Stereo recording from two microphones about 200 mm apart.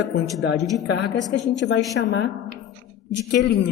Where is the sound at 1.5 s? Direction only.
65° left (ahead or behind).